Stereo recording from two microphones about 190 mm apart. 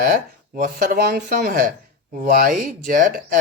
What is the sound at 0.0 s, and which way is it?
Speech, 45° right (ahead or behind).